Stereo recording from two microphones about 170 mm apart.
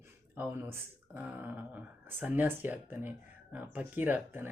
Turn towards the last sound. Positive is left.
turn(degrees=-10)  # may be behind; listen again after turning